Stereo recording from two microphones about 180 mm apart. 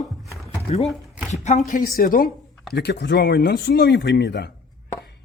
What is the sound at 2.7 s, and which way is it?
A man's voice, 70° left (ahead or behind).